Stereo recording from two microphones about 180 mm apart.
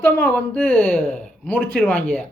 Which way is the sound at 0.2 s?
10° left (ahead or behind).